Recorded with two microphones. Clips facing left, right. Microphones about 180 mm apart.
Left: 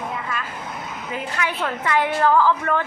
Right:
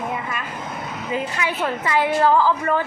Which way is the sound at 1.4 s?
10° right (ahead or behind).